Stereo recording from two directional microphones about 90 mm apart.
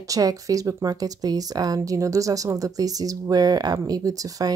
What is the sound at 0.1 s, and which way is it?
Speech, 40° right (ahead or behind).